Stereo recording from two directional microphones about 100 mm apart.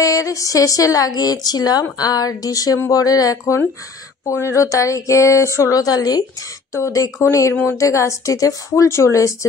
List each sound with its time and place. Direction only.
0.0 s a woman's voice: 35° left (ahead or behind)